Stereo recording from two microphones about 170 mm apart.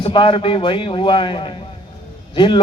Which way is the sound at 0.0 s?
30° left (ahead or behind).